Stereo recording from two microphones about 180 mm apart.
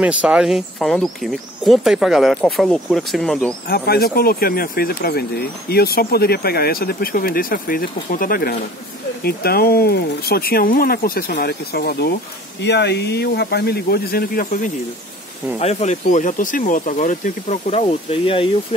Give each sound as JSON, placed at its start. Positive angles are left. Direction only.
{"t": 0.0, "sound": "speech", "side_deg": -5}
{"t": 3.6, "sound": "speech", "side_deg": 60}
{"t": 15.6, "sound": "speech", "side_deg": 35}